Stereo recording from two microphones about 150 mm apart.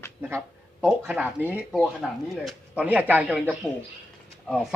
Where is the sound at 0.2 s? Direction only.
15° right (ahead or behind).